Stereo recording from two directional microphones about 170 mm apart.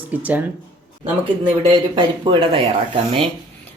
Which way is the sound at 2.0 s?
30° right (ahead or behind).